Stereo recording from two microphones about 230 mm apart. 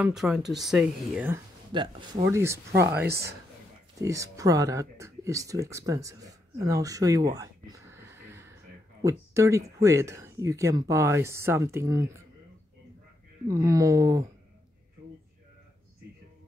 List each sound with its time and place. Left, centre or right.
0.0 s speech: centre
1.7 s speech: right
13.5 s speech: centre